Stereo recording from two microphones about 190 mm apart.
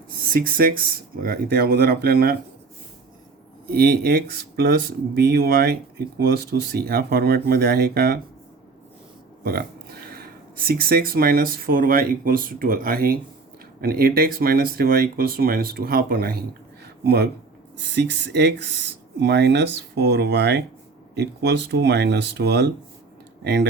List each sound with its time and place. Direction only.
0.3 s speech: 50° right (ahead or behind)
3.7 s speech: 55° right (ahead or behind)
9.4 s speech: 55° right (ahead or behind)